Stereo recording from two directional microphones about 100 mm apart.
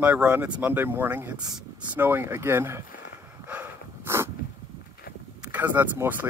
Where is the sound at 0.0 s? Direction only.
15° right (ahead or behind).